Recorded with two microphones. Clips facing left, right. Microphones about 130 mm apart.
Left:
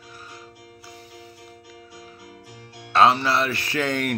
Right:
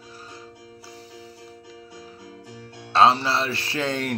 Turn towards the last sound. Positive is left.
turn(degrees=-30)  # may be behind; listen again after turning